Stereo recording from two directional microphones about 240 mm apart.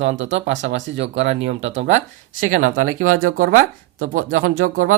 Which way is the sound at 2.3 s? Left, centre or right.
Right.